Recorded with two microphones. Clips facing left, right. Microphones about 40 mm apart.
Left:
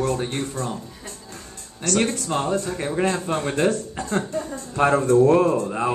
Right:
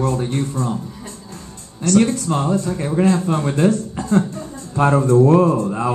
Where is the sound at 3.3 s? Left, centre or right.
Left.